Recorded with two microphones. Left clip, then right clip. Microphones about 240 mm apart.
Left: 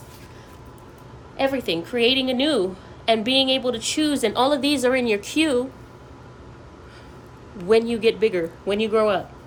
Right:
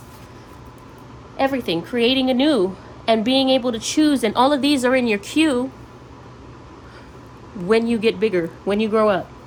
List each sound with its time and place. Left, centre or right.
1.4 s a woman's voice: right
7.7 s a woman's voice: right